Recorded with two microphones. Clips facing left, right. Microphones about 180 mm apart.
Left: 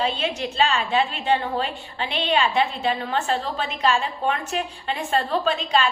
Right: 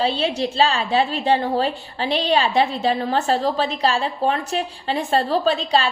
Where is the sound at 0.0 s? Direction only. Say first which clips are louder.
Right 4 dB; 35° right (ahead or behind).